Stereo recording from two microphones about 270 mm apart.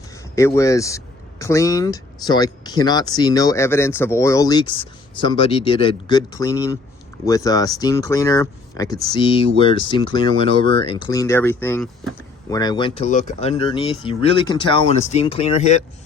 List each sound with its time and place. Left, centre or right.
0.3 s speech: centre